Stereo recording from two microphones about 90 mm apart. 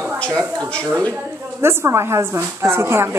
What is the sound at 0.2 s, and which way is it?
Speech, 10° left (ahead or behind).